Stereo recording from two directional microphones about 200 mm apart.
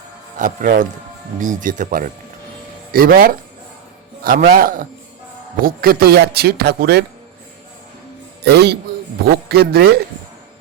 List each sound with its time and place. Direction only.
0.3 s speech: 40° right (ahead or behind)
8.4 s speech: 55° right (ahead or behind)